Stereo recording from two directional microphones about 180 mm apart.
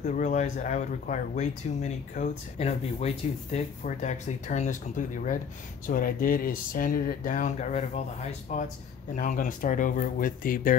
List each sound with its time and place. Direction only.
0.0 s speech: 45° left (ahead or behind)